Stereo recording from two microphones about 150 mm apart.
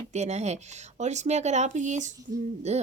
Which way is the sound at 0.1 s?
50° right (ahead or behind).